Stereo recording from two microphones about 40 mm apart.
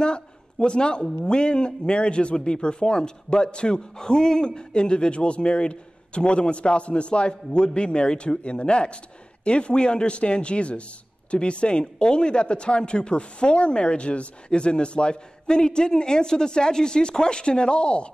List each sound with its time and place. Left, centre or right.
0.0 s a man's voice: left